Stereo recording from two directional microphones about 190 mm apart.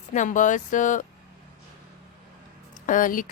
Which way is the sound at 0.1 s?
40° left (ahead or behind).